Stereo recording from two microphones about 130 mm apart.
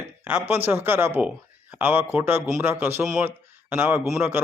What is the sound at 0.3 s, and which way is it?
A man's voice, 15° right (ahead or behind).